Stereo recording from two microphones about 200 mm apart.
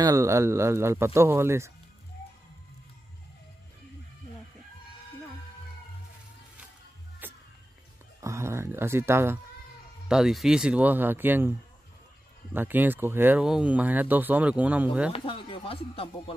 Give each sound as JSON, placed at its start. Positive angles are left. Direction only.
{"t": 0.0, "sound": "speech", "side_deg": -15}
{"t": 7.2, "sound": "music", "side_deg": -10}
{"t": 8.2, "sound": "speech", "side_deg": -15}
{"t": 12.5, "sound": "speech", "side_deg": -10}
{"t": 15.1, "sound": "speech", "side_deg": 25}